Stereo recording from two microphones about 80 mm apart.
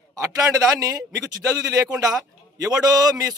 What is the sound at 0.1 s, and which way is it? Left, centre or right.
A man's voice, right.